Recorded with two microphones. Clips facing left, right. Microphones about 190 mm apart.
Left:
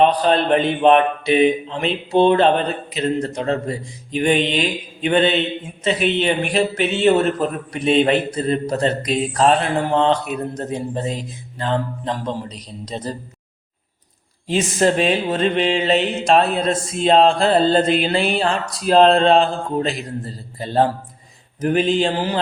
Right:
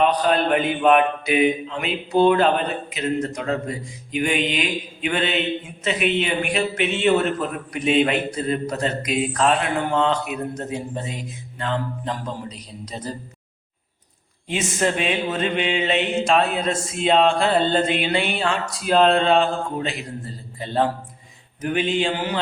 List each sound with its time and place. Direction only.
0.0 s speech: 30° left (ahead or behind)
14.4 s speech: 35° left (ahead or behind)